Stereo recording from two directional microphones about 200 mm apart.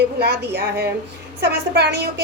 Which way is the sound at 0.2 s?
55° right (ahead or behind).